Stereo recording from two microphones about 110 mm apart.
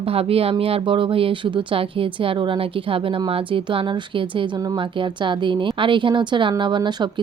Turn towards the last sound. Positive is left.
turn(degrees=-45)  # may be behind; listen again after turning